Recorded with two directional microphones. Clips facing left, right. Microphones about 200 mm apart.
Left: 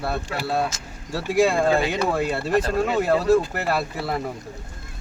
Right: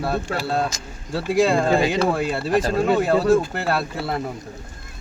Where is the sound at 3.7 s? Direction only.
Centre (ahead or behind).